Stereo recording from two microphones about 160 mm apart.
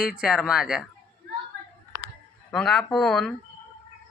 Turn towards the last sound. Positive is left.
turn(degrees=0)  # may be behind; listen again after turning